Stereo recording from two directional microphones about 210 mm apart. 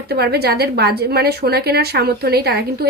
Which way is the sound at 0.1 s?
50° right (ahead or behind).